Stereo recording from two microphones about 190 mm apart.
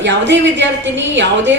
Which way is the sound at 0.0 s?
70° right (ahead or behind).